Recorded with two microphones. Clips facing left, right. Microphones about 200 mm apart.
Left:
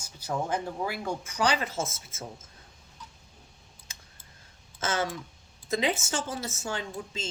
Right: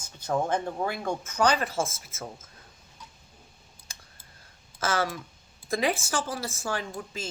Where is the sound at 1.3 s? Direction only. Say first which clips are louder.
Right 3 dB; 45° right (ahead or behind).